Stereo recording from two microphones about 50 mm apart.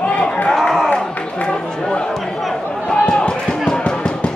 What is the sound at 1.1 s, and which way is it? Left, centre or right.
Speech, left.